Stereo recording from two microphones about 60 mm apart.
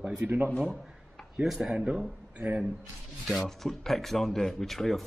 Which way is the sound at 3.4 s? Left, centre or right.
Centre.